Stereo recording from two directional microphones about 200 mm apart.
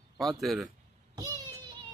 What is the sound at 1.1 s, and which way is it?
Child singing, 20° right (ahead or behind).